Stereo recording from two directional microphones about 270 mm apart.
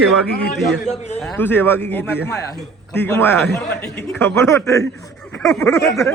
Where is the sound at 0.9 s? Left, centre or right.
Left.